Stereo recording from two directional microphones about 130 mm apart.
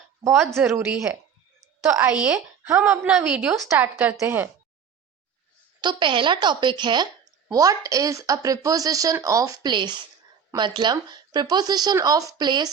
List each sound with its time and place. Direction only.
0.6 s a woman's voice: 5° right (ahead or behind)
2.6 s a woman's voice: 20° right (ahead or behind)
5.8 s speech: 35° right (ahead or behind)